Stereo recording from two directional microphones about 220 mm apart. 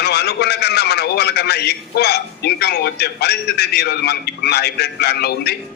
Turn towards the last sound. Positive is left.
turn(degrees=45)  # may be behind; listen again after turning